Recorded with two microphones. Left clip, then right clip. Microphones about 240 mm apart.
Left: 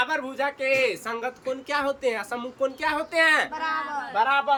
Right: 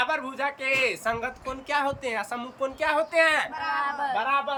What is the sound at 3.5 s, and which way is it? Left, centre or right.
Speech, left.